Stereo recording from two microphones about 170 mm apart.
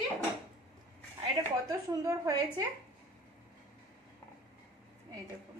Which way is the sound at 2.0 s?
20° right (ahead or behind).